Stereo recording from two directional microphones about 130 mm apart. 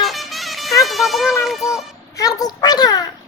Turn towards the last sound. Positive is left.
turn(degrees=30)  # may be behind; listen again after turning